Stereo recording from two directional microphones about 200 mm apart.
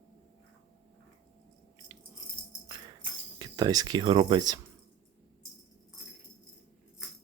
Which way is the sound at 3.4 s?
20° right (ahead or behind).